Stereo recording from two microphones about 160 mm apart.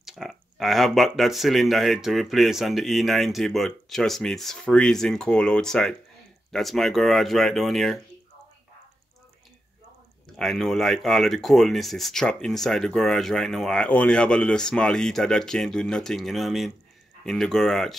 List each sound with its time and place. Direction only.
0.0 s speech: centre (ahead or behind)
10.3 s speech: centre (ahead or behind)